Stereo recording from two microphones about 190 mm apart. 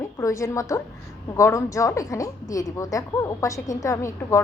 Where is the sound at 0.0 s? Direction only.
15° left (ahead or behind).